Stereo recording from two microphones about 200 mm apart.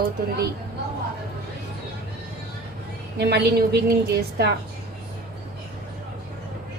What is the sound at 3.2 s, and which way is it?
A woman's voice, 55° right (ahead or behind).